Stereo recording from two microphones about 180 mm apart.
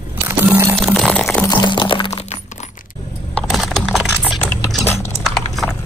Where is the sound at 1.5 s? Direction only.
25° left (ahead or behind).